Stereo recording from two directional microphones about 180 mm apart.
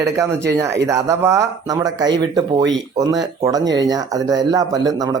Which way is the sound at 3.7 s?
20° right (ahead or behind).